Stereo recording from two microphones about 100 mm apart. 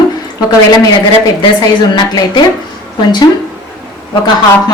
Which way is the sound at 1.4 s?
40° left (ahead or behind).